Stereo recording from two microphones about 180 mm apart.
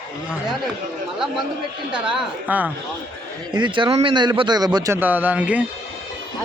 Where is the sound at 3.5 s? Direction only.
25° right (ahead or behind); by 5.6 s 10° right (ahead or behind).